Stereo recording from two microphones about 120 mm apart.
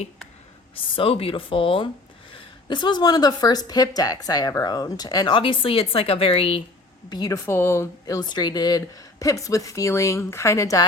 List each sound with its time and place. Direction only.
0.8 s speech: 50° left (ahead or behind)
7.1 s a woman's voice: 30° left (ahead or behind)